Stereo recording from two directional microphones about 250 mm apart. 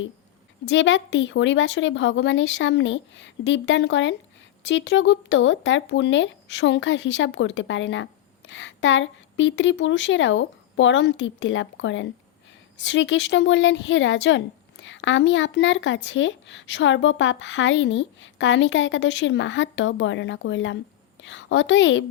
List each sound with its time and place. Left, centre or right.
0.6 s a woman's voice: left